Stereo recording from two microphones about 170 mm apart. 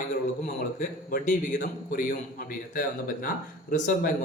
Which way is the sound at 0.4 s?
50° left (ahead or behind).